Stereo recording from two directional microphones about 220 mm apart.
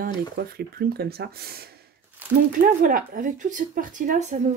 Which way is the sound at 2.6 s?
40° right (ahead or behind).